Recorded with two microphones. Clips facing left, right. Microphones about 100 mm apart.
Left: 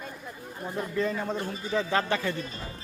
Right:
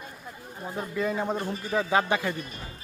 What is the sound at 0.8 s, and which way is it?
A man's voice, 5° right (ahead or behind).